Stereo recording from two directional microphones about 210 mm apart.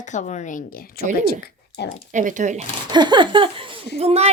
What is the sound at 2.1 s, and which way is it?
Speech, 35° right (ahead or behind).